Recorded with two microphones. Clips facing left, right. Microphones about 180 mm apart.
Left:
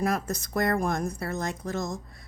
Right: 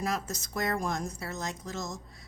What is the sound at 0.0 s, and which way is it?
Speech, 55° left (ahead or behind).